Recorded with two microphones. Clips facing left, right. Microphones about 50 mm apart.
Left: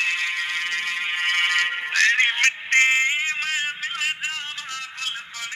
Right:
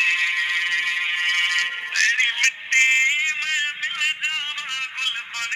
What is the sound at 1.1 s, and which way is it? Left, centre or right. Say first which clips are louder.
Music: left 2 dB; centre.